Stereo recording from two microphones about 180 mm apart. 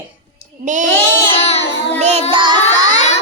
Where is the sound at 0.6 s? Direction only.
45° right (ahead or behind).